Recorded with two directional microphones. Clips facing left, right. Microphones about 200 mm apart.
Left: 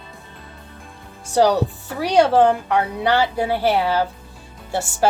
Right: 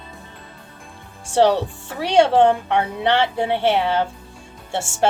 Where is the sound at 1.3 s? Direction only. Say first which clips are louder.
Even; 25° right (ahead or behind).